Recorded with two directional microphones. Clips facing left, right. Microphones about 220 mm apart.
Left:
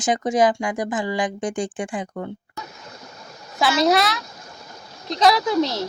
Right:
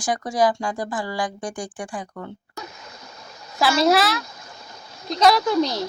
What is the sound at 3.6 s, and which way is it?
Speech, centre (ahead or behind).